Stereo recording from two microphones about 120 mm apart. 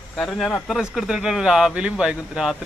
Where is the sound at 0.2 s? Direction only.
Centre (ahead or behind).